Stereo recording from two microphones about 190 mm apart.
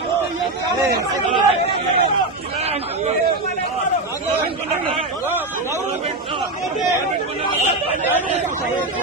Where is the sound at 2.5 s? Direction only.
35° right (ahead or behind).